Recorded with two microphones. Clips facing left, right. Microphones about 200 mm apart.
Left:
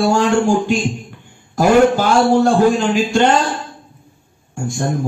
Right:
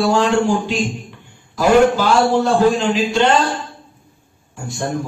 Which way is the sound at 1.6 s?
50° left (ahead or behind).